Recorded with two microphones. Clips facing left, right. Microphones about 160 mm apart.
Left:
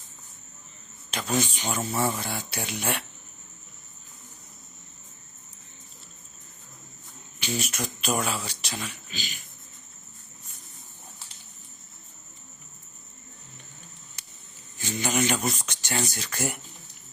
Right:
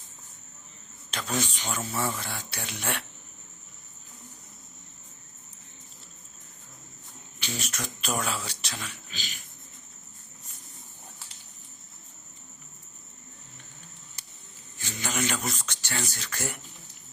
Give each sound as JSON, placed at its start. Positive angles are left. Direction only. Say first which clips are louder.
{"t": 1.1, "sound": "a man's voice", "louder": "left 4 dB", "side_deg": 5}
{"t": 1.6, "sound": "speech", "louder": "left 4 dB", "side_deg": 20}
{"t": 7.3, "sound": "speech", "louder": "left 5 dB", "side_deg": 10}
{"t": 14.8, "sound": "a sound", "louder": "left 5 dB", "side_deg": 15}
{"t": 16.1, "sound": "speech", "louder": "left 4 dB", "side_deg": 15}